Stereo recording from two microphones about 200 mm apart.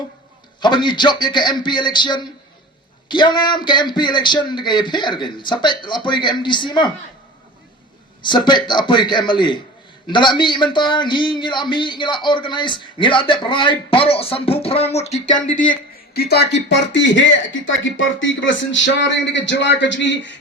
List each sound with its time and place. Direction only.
0.6 s a man's voice: 20° left (ahead or behind)
8.2 s a man's voice: 20° left (ahead or behind); by 20.3 s 65° left (ahead or behind)